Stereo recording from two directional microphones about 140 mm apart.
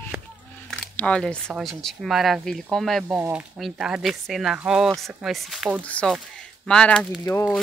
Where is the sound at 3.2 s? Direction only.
15° right (ahead or behind).